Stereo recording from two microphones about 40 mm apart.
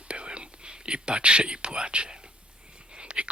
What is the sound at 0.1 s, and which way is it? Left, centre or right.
Whispering, right.